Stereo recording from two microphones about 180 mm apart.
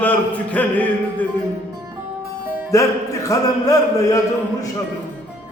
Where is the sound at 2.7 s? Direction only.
15° left (ahead or behind).